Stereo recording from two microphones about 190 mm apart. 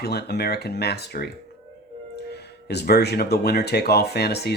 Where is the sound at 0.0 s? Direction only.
55° left (ahead or behind).